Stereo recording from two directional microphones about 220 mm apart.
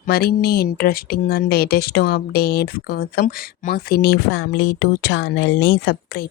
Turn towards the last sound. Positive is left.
turn(degrees=45)  # may be behind; listen again after turning